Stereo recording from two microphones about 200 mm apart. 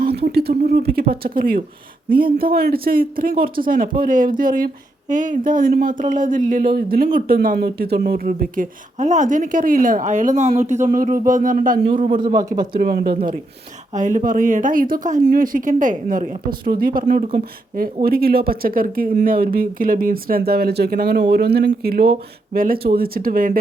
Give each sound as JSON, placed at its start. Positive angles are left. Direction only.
{"t": 0.0, "sound": "a sound", "side_deg": -50}
{"t": 1.1, "sound": "speech", "side_deg": -45}
{"t": 12.1, "sound": "speech", "side_deg": -20}
{"t": 12.7, "sound": "speech", "side_deg": -45}